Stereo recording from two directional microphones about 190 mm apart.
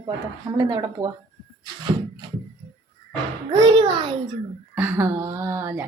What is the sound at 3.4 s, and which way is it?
Speech, 25° right (ahead or behind).